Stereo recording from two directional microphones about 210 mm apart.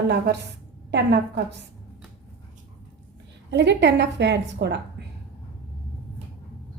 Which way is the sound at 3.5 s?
55° right (ahead or behind).